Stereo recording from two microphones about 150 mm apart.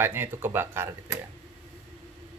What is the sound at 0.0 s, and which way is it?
Speech, 15° right (ahead or behind).